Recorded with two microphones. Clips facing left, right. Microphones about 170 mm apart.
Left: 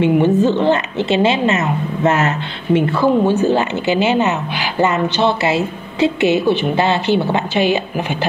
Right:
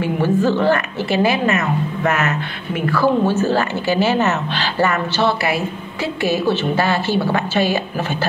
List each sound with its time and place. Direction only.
0.0 s speech: 20° left (ahead or behind)